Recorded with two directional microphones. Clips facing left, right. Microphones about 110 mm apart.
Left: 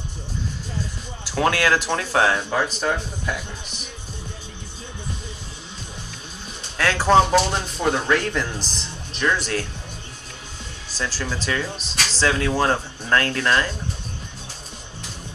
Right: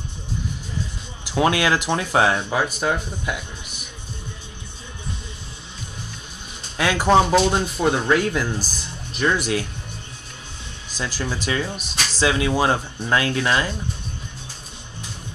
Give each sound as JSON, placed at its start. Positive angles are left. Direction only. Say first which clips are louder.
{"t": 1.2, "sound": "speech", "louder": "right 1 dB", "side_deg": -15}
{"t": 6.8, "sound": "speech", "louder": "even", "side_deg": -15}
{"t": 10.9, "sound": "speech", "louder": "right 1 dB", "side_deg": -15}